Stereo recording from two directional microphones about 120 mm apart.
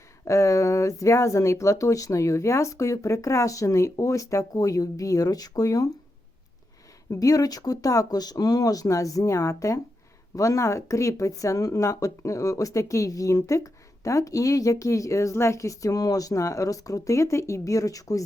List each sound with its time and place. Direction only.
0.3 s speech: 25° left (ahead or behind)
7.1 s speech: 30° left (ahead or behind)